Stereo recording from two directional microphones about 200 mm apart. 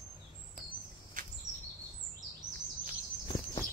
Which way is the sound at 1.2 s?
40° right (ahead or behind).